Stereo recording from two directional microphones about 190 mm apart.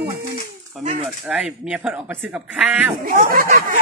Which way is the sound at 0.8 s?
30° right (ahead or behind).